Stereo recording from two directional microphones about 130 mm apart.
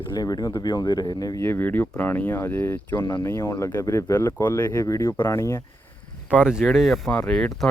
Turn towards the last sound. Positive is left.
turn(degrees=5)  # may be behind; listen again after turning